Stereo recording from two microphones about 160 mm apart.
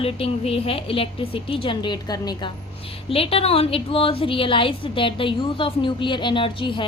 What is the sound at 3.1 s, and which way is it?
A woman's voice, 35° left (ahead or behind).